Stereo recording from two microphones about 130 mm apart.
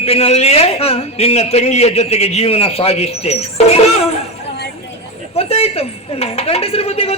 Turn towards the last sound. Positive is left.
turn(degrees=50)  # may be behind; listen again after turning